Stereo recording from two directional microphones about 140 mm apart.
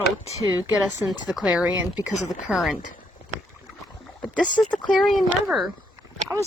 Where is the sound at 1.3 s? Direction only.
5° right (ahead or behind).